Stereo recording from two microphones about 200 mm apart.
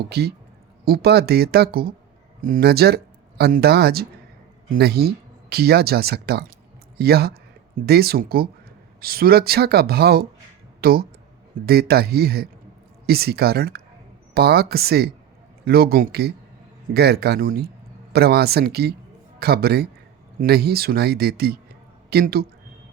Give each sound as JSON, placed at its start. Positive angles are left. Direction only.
{"t": 0.1, "sound": "speech", "side_deg": -55}
{"t": 10.8, "sound": "a sound", "side_deg": -50}
{"t": 11.6, "sound": "speech", "side_deg": -50}